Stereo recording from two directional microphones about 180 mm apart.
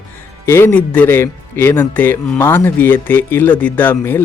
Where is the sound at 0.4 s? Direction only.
10° left (ahead or behind).